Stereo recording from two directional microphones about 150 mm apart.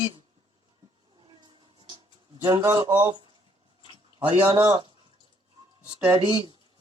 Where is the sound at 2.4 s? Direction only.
30° right (ahead or behind).